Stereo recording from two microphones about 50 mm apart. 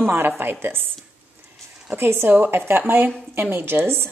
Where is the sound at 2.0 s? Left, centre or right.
Right.